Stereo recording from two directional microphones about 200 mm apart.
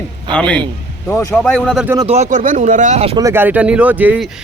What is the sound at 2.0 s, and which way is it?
Speech, 35° right (ahead or behind).